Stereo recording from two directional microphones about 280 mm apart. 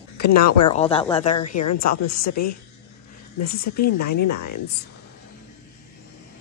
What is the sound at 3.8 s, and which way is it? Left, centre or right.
Speech, left.